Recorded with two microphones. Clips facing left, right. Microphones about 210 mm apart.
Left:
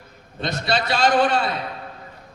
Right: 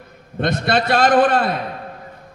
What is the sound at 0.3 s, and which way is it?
Mantra, 55° right (ahead or behind).